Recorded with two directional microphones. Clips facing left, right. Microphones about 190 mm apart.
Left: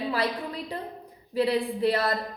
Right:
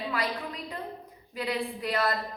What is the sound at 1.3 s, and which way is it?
Speech, 30° left (ahead or behind).